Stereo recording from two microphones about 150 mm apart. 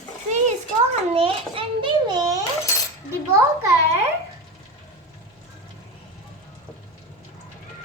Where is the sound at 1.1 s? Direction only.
40° right (ahead or behind).